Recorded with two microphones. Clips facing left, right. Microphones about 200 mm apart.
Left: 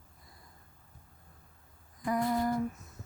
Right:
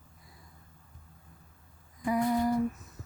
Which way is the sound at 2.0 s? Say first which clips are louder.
Right 3 dB; 10° right (ahead or behind).